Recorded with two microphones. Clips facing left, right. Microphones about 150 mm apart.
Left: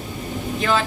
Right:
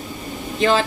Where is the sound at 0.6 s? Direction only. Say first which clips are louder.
Right 4 dB; 30° right (ahead or behind).